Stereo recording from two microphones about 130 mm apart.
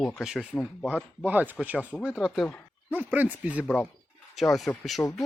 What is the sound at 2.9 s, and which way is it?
Speech, 15° right (ahead or behind).